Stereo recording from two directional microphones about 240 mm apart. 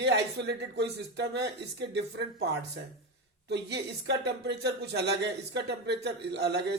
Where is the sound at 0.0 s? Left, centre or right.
Right.